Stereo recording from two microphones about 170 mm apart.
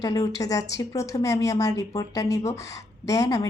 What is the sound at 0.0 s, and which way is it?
A woman's voice, 20° left (ahead or behind).